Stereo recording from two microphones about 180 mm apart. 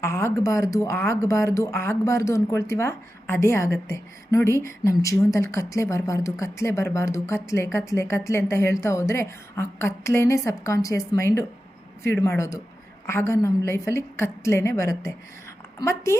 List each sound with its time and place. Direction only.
0.0 s speech: 15° left (ahead or behind)